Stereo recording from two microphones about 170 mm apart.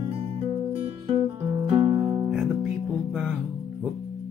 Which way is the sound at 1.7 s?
30° right (ahead or behind).